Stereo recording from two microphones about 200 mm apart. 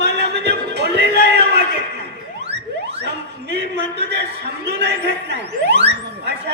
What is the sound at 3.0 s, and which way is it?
A man's voice, 55° right (ahead or behind).